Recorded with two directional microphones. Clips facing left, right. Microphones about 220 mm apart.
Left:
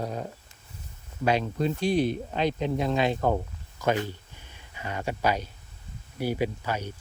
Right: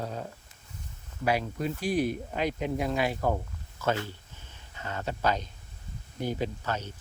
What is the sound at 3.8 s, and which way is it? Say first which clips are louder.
Speech: left 3 dB; 15° left (ahead or behind).